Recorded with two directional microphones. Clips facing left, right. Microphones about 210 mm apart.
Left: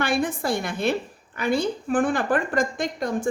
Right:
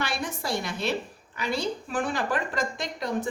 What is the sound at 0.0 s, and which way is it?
A woman's voice, 55° left (ahead or behind).